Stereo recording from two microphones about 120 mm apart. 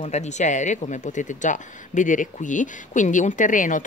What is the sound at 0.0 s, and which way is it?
A woman's voice, 70° left (ahead or behind).